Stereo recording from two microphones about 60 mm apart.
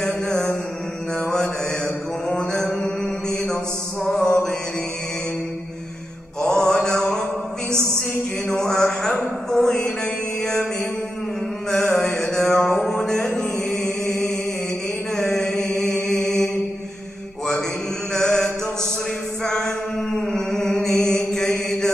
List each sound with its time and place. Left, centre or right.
0.0 s mantra: centre
2.3 s mantra: centre
4.0 s music: centre
6.4 s mantra: centre
8.5 s a sound: centre
10.4 s mantra: centre
11.7 s music: centre
15.1 s chant: centre
18.1 s chant: centre